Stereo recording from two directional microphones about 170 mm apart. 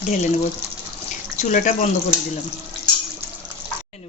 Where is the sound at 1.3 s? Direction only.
50° left (ahead or behind).